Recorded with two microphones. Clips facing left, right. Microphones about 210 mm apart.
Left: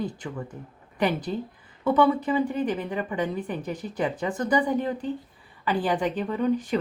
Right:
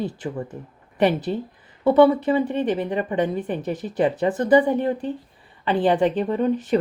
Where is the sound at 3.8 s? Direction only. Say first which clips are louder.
Right 8 dB; 20° right (ahead or behind).